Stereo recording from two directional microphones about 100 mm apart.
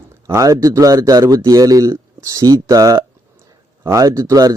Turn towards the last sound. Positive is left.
turn(degrees=-35)  # may be behind; listen again after turning